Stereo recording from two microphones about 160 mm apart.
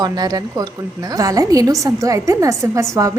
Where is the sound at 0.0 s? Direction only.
25° right (ahead or behind).